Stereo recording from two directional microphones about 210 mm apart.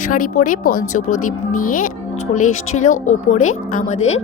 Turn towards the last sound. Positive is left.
turn(degrees=35)  # may be behind; listen again after turning